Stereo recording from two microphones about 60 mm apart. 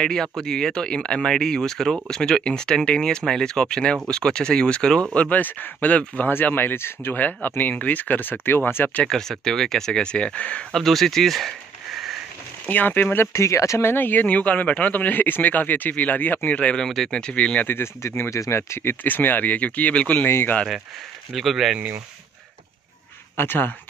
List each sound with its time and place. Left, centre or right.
0.0 s a man's voice: centre; by 8.9 s left
9.0 s speech: centre
10.7 s speech: centre
12.6 s speech: left
13.3 s speech: left
13.8 s a man's voice: left
16.8 s speech: centre
18.0 s speech: left
18.3 s speech: left
20.2 s speech: left
21.3 s speech: centre
23.3 s speech: left